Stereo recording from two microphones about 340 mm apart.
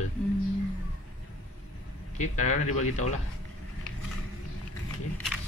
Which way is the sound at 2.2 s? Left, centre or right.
Left.